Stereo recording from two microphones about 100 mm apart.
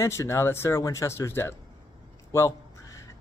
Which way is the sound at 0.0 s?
30° left (ahead or behind).